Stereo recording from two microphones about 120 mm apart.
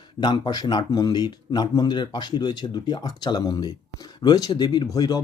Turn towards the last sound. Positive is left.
turn(degrees=35)  # may be behind; listen again after turning